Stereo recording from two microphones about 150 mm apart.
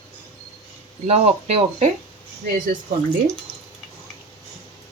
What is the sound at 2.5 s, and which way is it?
Speech, 65° right (ahead or behind).